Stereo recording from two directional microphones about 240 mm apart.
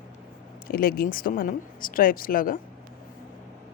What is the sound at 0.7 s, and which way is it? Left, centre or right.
Speech, left.